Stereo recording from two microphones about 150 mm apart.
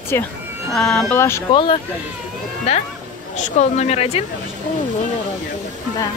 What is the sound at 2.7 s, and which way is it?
Speech, 45° left (ahead or behind).